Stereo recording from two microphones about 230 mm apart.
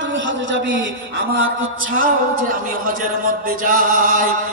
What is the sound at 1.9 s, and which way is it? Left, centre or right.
Speech, right.